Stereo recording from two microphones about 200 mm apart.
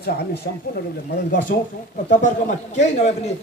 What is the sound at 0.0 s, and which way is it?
Speech, 55° left (ahead or behind).